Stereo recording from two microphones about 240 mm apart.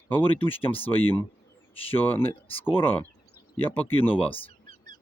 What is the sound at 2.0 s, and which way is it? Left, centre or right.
Speech, centre.